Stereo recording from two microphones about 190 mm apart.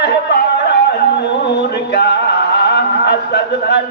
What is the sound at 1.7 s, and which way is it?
Music, 65° left (ahead or behind).